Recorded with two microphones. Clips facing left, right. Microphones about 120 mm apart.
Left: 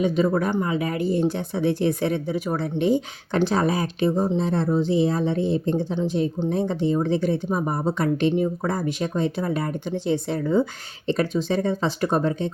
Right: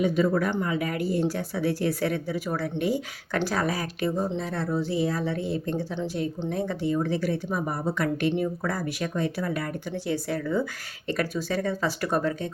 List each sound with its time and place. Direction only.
0.0 s a woman's voice: 25° left (ahead or behind)